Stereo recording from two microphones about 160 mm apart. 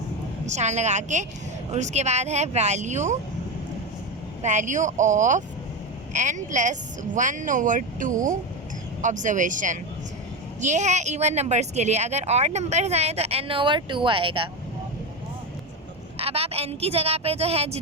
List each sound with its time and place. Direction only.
0.4 s speech: 45° right (ahead or behind)
4.4 s speech: 50° right (ahead or behind); by 14.5 s 35° right (ahead or behind)
16.1 s a woman's voice: 40° right (ahead or behind)